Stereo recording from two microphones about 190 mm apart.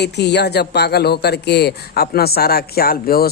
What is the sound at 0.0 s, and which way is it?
Speech, 60° left (ahead or behind).